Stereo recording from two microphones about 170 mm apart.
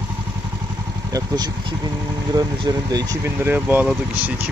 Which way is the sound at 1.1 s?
20° right (ahead or behind).